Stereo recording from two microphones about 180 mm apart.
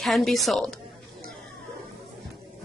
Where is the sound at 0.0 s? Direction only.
Centre (ahead or behind).